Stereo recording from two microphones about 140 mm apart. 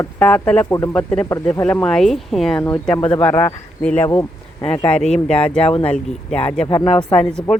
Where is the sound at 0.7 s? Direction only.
20° left (ahead or behind).